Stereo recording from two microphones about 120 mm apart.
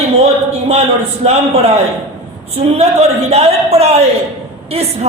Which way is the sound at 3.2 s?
60° right (ahead or behind).